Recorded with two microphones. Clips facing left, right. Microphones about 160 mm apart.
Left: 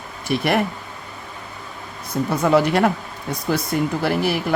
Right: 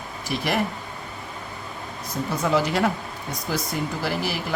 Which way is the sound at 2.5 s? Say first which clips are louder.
Left 5 dB; 60° left (ahead or behind).